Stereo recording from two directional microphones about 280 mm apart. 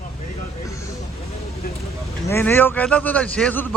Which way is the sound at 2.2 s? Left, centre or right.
Centre.